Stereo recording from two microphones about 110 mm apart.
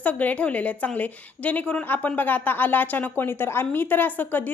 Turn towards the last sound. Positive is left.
turn(degrees=15)  # may be behind; listen again after turning